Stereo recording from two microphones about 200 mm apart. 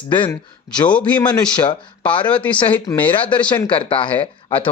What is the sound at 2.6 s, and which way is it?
Speech, 25° left (ahead or behind).